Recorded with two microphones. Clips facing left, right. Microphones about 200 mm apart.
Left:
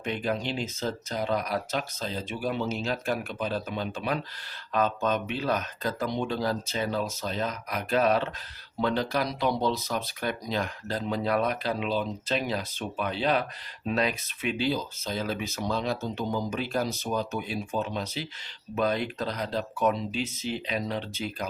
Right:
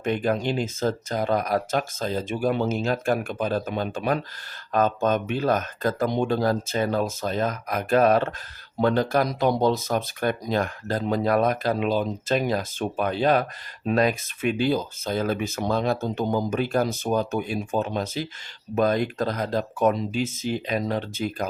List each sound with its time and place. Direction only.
0.0 s speech: 50° right (ahead or behind)